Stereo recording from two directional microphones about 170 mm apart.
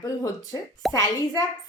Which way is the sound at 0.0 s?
20° left (ahead or behind).